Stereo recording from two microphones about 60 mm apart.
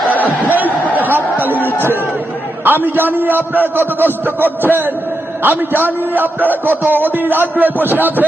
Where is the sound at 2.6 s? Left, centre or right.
Right.